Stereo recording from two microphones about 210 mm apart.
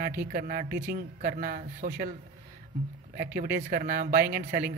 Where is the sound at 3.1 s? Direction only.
45° right (ahead or behind).